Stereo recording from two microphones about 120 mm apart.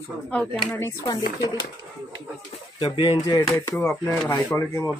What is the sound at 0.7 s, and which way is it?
Speech, 20° left (ahead or behind).